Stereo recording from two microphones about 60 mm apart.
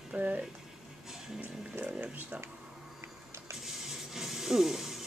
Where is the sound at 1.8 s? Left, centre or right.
Right.